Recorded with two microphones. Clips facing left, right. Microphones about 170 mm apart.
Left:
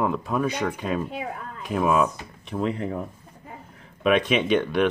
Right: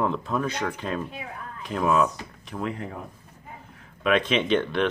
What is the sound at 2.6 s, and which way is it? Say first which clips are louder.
Speech: left 5 dB; 30° left (ahead or behind).